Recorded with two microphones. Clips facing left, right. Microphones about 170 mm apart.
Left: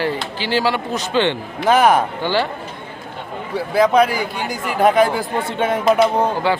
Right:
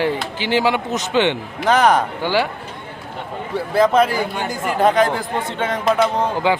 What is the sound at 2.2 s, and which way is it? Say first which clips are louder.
Speech: even; 10° right (ahead or behind).